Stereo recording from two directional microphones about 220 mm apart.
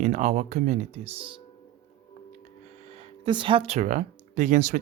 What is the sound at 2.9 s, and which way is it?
Speech, 25° right (ahead or behind).